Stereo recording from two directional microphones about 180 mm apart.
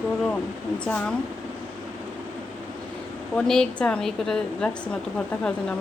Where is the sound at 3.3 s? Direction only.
5° left (ahead or behind).